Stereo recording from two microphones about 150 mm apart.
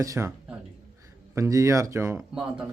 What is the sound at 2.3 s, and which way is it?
Speech, 5° right (ahead or behind).